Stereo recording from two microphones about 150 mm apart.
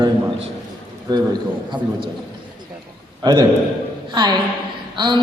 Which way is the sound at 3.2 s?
30° right (ahead or behind).